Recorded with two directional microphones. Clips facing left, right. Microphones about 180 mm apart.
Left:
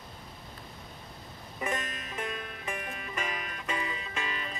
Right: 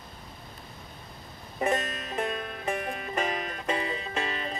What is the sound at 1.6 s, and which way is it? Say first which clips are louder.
Music: right 7 dB; 40° right (ahead or behind).